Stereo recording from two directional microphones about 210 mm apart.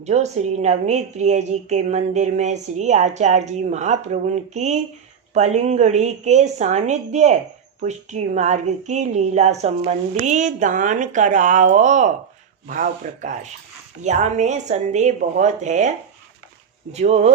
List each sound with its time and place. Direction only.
0.0 s a woman's voice: 30° right (ahead or behind)
16.9 s a woman's voice: 30° right (ahead or behind)